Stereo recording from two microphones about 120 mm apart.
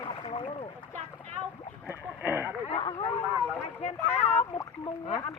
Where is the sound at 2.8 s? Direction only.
55° left (ahead or behind).